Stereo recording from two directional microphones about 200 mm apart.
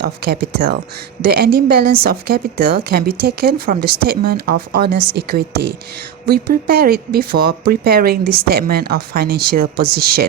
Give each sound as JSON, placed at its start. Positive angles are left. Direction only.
{"t": 0.0, "sound": "speech", "side_deg": -50}